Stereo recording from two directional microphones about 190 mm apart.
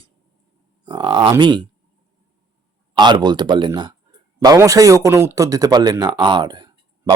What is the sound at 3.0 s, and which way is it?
A man's voice, 25° right (ahead or behind).